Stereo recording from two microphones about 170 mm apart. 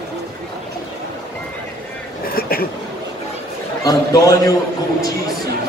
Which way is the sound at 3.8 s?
20° left (ahead or behind).